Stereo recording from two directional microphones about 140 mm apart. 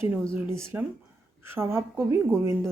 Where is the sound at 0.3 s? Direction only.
20° right (ahead or behind).